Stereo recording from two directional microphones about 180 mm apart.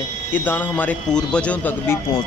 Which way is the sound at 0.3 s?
10° left (ahead or behind).